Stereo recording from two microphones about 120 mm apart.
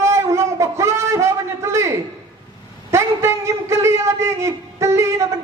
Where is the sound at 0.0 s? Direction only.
25° right (ahead or behind).